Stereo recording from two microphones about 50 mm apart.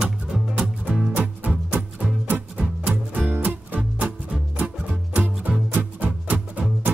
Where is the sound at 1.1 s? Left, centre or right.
Right.